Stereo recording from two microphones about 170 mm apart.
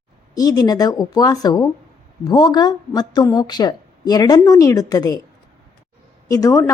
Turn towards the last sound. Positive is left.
turn(degrees=20)  # may be behind; listen again after turning